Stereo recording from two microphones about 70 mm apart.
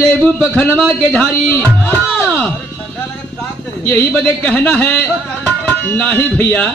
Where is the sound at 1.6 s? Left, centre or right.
Left.